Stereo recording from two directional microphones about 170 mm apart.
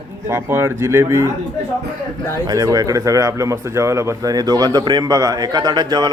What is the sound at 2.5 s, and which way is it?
Speech, 20° right (ahead or behind).